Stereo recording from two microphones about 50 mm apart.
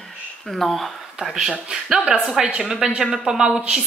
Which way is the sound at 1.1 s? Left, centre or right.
Centre.